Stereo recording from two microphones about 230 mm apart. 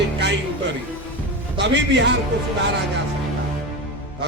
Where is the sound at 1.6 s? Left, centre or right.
Right.